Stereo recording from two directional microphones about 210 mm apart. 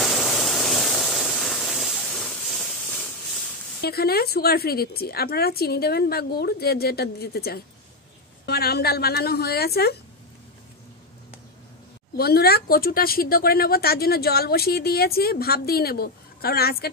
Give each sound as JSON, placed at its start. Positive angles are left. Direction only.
{"t": 0.0, "sound": "a sound", "side_deg": 0}
{"t": 3.8, "sound": "speech", "side_deg": 45}
{"t": 12.2, "sound": "speech", "side_deg": 50}